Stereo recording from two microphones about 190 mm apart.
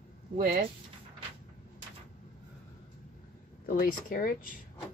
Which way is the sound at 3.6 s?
50° left (ahead or behind).